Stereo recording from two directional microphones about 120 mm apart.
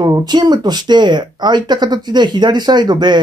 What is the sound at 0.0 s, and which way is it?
Speech, 35° right (ahead or behind).